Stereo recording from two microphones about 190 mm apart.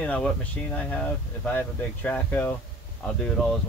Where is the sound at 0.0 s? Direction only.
5° left (ahead or behind).